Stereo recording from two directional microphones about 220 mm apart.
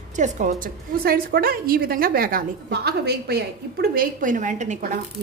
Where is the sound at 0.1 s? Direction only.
35° right (ahead or behind).